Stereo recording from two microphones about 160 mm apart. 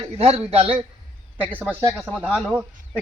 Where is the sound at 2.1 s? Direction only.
Centre (ahead or behind).